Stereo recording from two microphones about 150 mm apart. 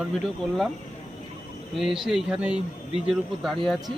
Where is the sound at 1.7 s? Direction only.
Centre (ahead or behind).